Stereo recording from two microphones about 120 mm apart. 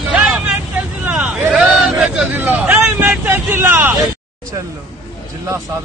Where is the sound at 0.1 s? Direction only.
5° right (ahead or behind).